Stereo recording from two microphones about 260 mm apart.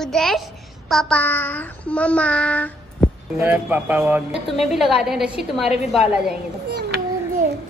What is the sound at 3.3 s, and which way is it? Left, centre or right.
Speech, centre.